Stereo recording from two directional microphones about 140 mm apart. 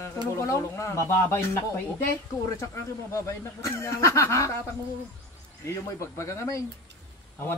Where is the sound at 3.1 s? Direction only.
20° left (ahead or behind).